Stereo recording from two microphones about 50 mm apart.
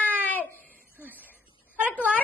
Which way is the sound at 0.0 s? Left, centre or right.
Left.